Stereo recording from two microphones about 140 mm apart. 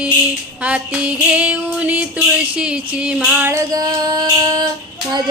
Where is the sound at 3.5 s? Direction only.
25° right (ahead or behind).